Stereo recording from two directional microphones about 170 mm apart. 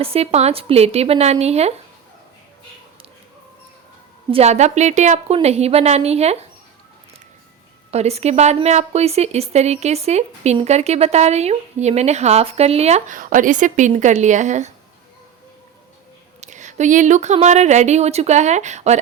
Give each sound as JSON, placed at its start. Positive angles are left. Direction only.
{"t": 0.0, "sound": "speech", "side_deg": -35}
{"t": 4.3, "sound": "speech", "side_deg": -40}
{"t": 7.9, "sound": "speech", "side_deg": -40}
{"t": 16.4, "sound": "speech", "side_deg": -45}